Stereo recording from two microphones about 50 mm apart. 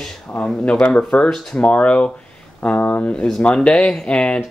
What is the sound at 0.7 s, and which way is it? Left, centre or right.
Speech, left.